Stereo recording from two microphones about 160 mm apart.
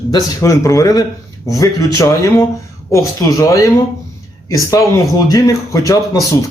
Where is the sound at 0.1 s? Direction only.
25° left (ahead or behind).